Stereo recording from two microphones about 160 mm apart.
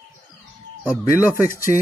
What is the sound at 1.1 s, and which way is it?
Speech, 15° right (ahead or behind).